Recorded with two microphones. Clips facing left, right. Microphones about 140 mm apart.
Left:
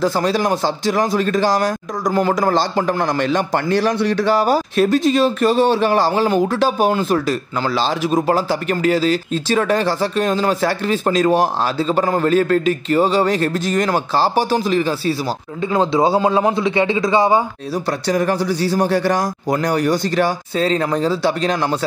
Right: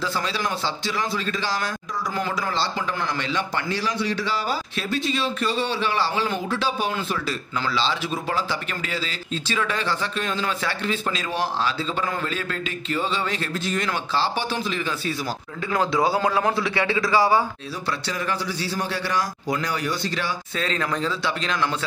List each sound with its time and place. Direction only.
0.0 s speech: 45° left (ahead or behind)
15.7 s a man's voice: 25° left (ahead or behind)
17.8 s speech: 45° left (ahead or behind)